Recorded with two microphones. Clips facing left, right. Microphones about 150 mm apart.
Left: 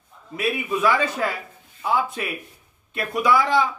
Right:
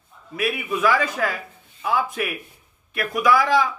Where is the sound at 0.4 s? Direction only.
25° left (ahead or behind).